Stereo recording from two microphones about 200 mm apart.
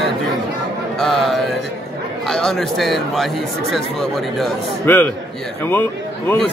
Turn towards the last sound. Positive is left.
turn(degrees=10)  # may be behind; listen again after turning